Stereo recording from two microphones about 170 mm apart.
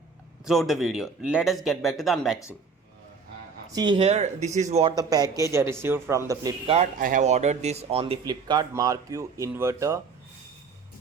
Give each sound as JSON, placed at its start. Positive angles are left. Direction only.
{"t": 0.4, "sound": "speech", "side_deg": 0}
{"t": 3.8, "sound": "speech", "side_deg": -30}
{"t": 4.9, "sound": "speech", "side_deg": -20}
{"t": 7.0, "sound": "speech", "side_deg": -50}